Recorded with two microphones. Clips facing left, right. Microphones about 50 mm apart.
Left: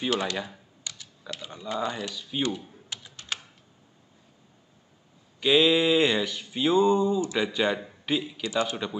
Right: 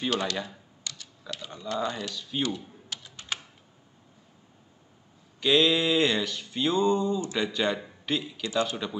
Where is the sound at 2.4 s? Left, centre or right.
Centre.